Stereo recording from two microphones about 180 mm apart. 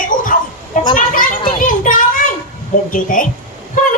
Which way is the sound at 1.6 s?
50° left (ahead or behind).